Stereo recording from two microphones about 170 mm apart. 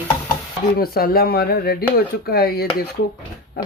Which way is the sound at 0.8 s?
60° left (ahead or behind).